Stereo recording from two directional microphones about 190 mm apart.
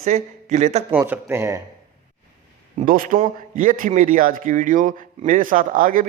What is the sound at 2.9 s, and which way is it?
A man's voice, 45° right (ahead or behind).